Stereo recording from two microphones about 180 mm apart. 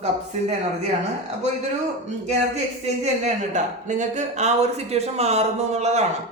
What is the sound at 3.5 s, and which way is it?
Speech, 45° right (ahead or behind).